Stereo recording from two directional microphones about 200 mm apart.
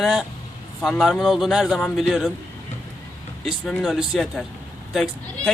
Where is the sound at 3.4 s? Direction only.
Centre (ahead or behind).